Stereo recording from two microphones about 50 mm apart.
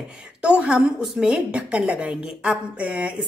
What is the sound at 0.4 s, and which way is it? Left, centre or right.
A woman's voice, right.